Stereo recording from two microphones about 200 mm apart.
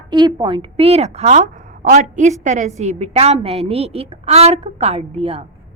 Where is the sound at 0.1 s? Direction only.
20° right (ahead or behind).